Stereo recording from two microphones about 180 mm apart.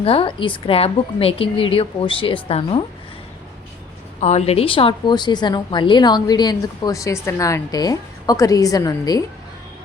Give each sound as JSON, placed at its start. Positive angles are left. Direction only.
{"t": 0.0, "sound": "a woman's voice", "side_deg": 30}
{"t": 4.2, "sound": "a woman's voice", "side_deg": 40}